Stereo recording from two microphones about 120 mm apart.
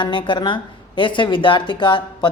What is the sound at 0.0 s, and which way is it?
A woman's voice, 40° left (ahead or behind).